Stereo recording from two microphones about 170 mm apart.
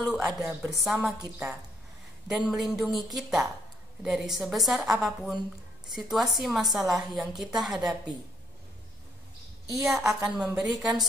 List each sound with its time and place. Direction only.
0.1 s a woman's voice: 5° right (ahead or behind)
2.2 s a woman's voice: 5° right (ahead or behind)
9.8 s a woman's voice: centre (ahead or behind)